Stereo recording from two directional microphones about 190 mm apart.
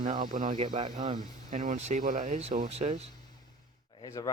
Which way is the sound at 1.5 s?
40° right (ahead or behind).